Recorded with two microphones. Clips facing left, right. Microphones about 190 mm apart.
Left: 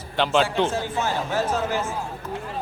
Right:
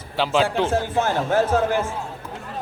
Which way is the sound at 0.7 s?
55° right (ahead or behind).